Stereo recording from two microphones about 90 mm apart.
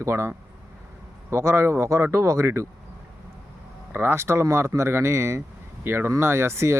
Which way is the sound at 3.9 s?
25° right (ahead or behind).